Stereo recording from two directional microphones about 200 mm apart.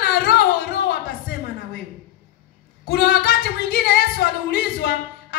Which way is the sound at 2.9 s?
55° left (ahead or behind).